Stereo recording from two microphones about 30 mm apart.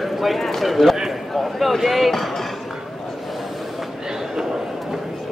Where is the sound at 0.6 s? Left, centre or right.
Centre.